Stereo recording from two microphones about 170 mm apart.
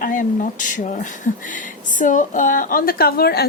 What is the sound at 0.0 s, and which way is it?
Speech, 55° left (ahead or behind).